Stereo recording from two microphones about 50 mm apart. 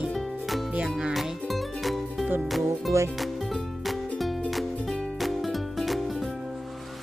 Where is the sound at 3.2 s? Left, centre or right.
Centre.